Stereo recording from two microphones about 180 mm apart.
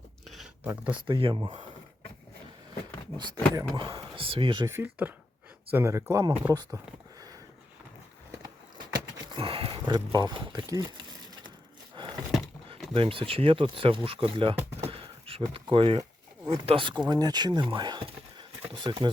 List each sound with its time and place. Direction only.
0.6 s speech: 10° right (ahead or behind)
1.0 s speech: 30° right (ahead or behind)
3.2 s speech: 20° right (ahead or behind)
4.7 s speech: 10° right (ahead or behind)
9.3 s speech: 30° right (ahead or behind)
11.9 s a sound: 25° right (ahead or behind)
12.9 s speech: 30° right (ahead or behind)
14.8 s a sound: 30° right (ahead or behind)
16.5 s speech: 30° right (ahead or behind)